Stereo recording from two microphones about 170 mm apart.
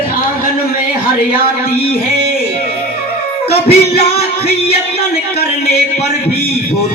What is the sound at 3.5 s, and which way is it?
Music, 35° left (ahead or behind).